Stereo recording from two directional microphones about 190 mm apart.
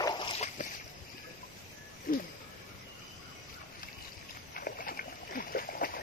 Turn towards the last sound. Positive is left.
turn(degrees=50)  # may be behind; listen again after turning